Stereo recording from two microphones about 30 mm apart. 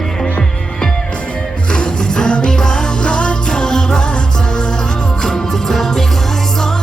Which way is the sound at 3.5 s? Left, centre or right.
Left.